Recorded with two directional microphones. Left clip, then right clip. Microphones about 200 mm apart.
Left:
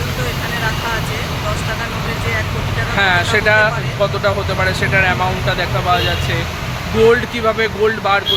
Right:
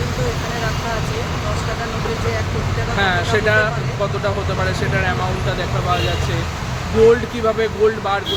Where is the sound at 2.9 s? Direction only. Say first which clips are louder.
Left 4 dB; 15° left (ahead or behind).